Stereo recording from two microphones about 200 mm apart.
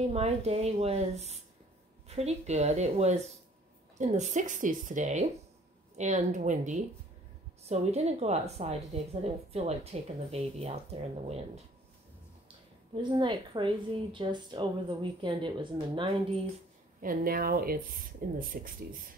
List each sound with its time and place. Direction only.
0.1 s a woman's voice: 30° right (ahead or behind)
12.9 s a woman's voice: 25° right (ahead or behind)
17.0 s speech: 45° right (ahead or behind)